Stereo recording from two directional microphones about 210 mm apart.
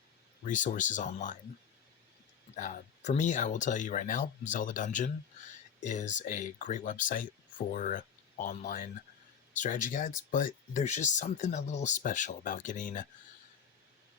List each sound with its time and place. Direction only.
0.4 s speech: 35° left (ahead or behind)
2.6 s speech: 35° left (ahead or behind)